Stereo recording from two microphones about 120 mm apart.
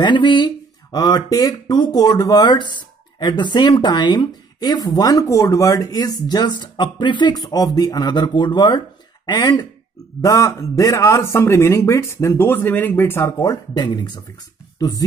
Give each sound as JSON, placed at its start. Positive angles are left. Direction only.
{"t": 0.0, "sound": "a man's voice", "side_deg": 40}